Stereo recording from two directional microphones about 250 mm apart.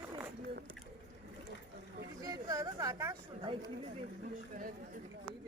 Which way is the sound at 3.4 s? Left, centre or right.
Right.